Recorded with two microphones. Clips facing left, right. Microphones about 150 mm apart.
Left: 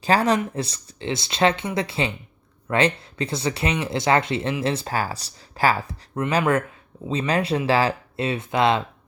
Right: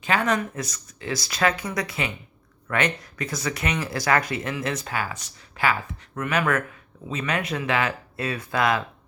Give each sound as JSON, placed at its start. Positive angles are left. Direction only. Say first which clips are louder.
{"t": 0.0, "sound": "speech", "louder": "left 4 dB", "side_deg": 35}